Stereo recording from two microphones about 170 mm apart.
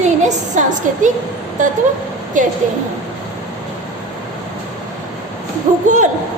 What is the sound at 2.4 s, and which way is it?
Speech, 50° right (ahead or behind).